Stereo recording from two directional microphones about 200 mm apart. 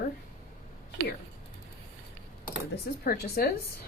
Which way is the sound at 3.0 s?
50° left (ahead or behind).